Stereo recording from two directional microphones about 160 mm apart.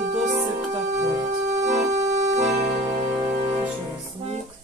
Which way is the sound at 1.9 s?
45° right (ahead or behind).